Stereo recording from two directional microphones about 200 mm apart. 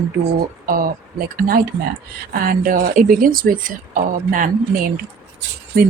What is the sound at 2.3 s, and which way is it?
A woman's voice, 45° right (ahead or behind).